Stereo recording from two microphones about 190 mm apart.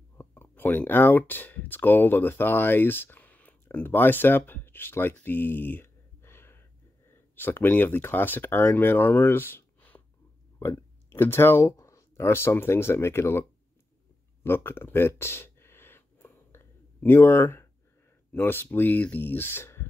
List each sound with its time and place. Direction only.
0.2 s speech: 10° left (ahead or behind)
14.4 s a sound: 10° left (ahead or behind)
18.3 s speech: 10° left (ahead or behind)